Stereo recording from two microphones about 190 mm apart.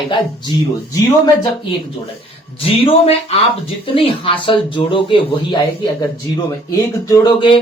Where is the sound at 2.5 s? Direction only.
30° left (ahead or behind).